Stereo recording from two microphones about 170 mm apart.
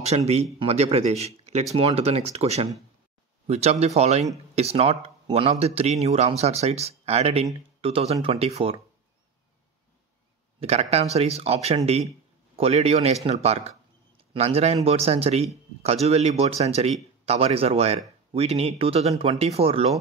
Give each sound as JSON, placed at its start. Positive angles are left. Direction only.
{"t": 0.0, "sound": "a man's voice", "side_deg": -40}
{"t": 10.6, "sound": "a man's voice", "side_deg": -40}